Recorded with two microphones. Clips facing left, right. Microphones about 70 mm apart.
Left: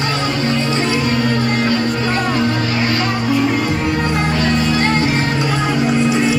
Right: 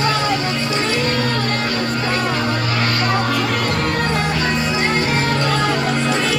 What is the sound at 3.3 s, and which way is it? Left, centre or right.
Music, right.